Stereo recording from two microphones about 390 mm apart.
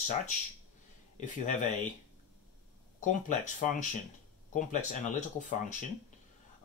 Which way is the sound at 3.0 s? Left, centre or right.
Centre.